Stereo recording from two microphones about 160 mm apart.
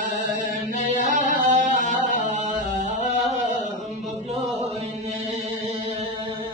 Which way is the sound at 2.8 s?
50° right (ahead or behind).